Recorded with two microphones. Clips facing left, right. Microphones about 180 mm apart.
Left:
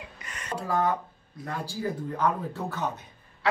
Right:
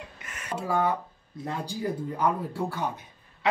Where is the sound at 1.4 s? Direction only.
15° right (ahead or behind).